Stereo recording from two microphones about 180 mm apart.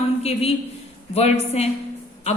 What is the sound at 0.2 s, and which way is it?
A woman's voice, 35° left (ahead or behind).